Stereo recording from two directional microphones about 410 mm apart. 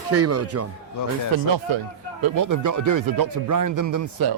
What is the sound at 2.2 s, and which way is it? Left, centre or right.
Speech, right.